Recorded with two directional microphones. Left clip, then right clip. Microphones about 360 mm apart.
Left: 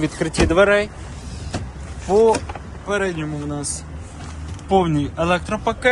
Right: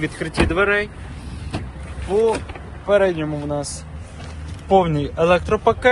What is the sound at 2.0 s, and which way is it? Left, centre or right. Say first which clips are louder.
Speech: left 3 dB; centre.